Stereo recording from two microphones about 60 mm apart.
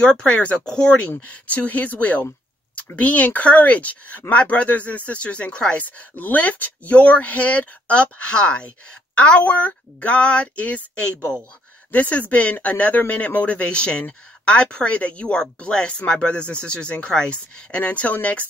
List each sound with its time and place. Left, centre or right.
0.0 s speech: centre